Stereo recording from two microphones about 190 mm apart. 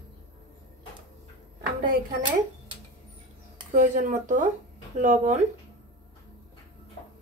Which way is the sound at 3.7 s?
45° right (ahead or behind).